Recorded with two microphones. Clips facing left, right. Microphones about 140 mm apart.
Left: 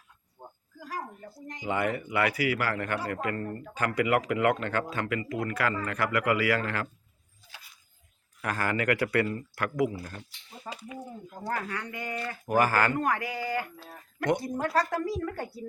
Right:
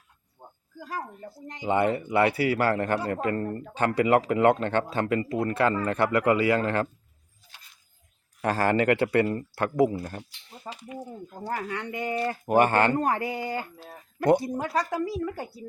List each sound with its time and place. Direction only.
0.9 s speech: 25° right (ahead or behind)
8.4 s speech: 30° right (ahead or behind)
11.7 s speech: 25° right (ahead or behind)
14.6 s a woman's voice: 5° right (ahead or behind)